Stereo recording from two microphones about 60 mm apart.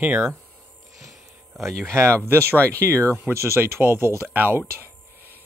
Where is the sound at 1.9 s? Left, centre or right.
Right.